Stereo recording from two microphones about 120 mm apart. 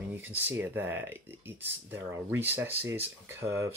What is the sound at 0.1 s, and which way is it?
Speech, 15° right (ahead or behind).